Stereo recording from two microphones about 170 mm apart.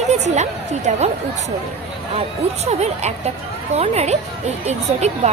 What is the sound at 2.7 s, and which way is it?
A woman's voice, 40° right (ahead or behind).